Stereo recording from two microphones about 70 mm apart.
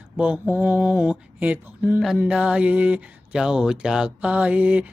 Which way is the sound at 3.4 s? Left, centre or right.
Centre.